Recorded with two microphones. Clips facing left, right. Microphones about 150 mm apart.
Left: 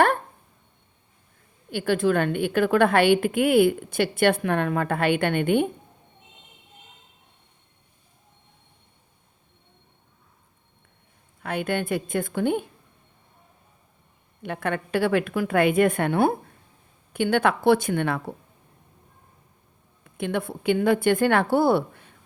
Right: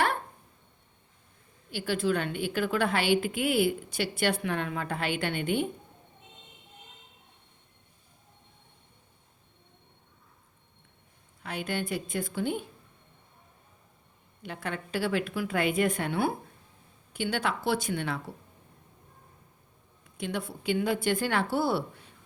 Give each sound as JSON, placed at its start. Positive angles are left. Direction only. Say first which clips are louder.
{"t": 1.7, "sound": "a woman's voice", "louder": "left 6 dB", "side_deg": 55}
{"t": 11.4, "sound": "a woman's voice", "louder": "left 7 dB", "side_deg": 55}
{"t": 14.4, "sound": "a woman's voice", "louder": "left 8 dB", "side_deg": 60}
{"t": 20.1, "sound": "a woman's voice", "louder": "left 7 dB", "side_deg": 55}